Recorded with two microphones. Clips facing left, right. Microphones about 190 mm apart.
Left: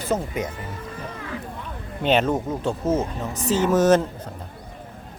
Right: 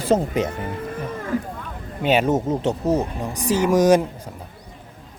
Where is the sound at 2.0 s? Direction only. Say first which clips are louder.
Right 1 dB; 10° right (ahead or behind).